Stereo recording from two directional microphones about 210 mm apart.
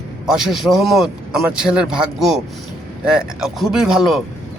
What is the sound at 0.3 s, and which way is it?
A man's voice, 5° right (ahead or behind).